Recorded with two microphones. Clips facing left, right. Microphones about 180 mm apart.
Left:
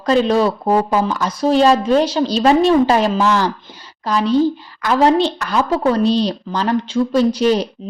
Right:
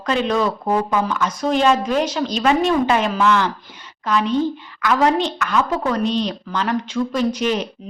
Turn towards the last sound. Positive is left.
turn(degrees=35)  # may be behind; listen again after turning